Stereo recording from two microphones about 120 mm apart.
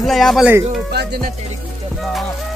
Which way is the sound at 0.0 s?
Centre (ahead or behind).